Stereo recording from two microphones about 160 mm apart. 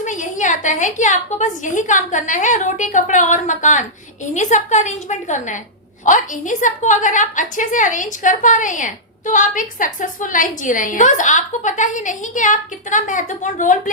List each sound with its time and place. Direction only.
0.0 s a woman's voice: 50° left (ahead or behind)